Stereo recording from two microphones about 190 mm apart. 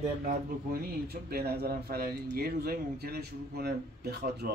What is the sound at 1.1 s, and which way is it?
Speech, 55° right (ahead or behind).